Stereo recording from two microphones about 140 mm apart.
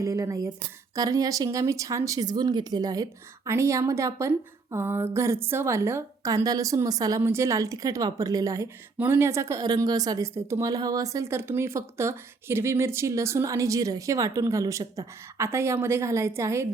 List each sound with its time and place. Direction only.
0.0 s a woman's voice: 20° right (ahead or behind)